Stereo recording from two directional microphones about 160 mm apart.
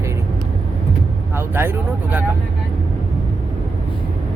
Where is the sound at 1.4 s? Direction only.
15° right (ahead or behind).